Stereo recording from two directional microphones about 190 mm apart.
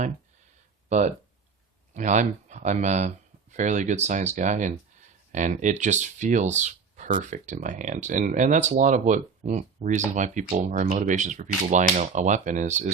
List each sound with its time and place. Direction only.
0.9 s speech: 40° right (ahead or behind)